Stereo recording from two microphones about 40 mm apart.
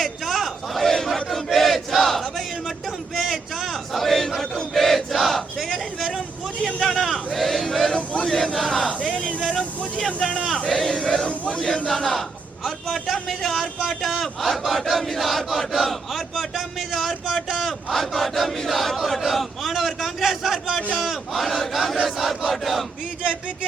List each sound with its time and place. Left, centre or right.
0.0 s crowd: centre
1.5 s battle cry: centre
3.2 s a sound: centre
3.9 s battle cry: centre
6.7 s a man's voice: centre
9.4 s a sound: centre
10.3 s a man's voice: centre
10.8 s a sound: centre
11.3 s speech: left
11.9 s a man's voice: centre
14.6 s battle cry: centre
18.9 s a sound: centre
20.9 s battle cry: centre
22.0 s crowd: centre